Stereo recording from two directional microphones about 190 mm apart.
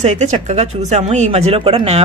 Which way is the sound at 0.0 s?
40° right (ahead or behind).